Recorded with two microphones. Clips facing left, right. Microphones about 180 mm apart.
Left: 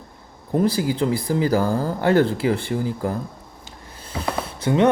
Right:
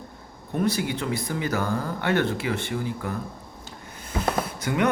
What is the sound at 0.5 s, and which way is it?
Speech, 30° left (ahead or behind).